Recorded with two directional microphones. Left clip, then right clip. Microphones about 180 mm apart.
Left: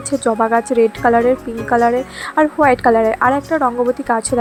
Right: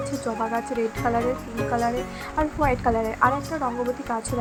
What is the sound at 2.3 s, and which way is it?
Speech, 40° left (ahead or behind).